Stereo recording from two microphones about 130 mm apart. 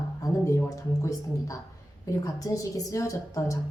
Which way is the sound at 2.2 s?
25° left (ahead or behind).